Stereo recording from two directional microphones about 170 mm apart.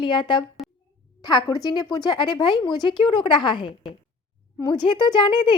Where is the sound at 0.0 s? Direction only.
30° left (ahead or behind).